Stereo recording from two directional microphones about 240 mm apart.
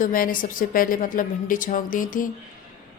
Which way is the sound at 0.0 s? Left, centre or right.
Left.